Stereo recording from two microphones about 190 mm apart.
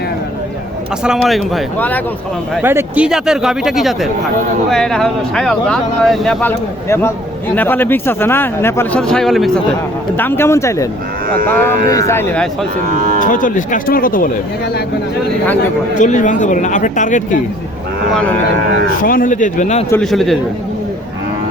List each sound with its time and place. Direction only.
1.0 s speech: 5° right (ahead or behind)
2.6 s speech: 10° right (ahead or behind)
6.8 s speech: 15° left (ahead or behind)
10.2 s speech: 10° left (ahead or behind)
13.1 s speech: 45° left (ahead or behind)
16.0 s speech: 40° left (ahead or behind)
19.0 s speech: 45° left (ahead or behind)
19.9 s speech: 5° left (ahead or behind)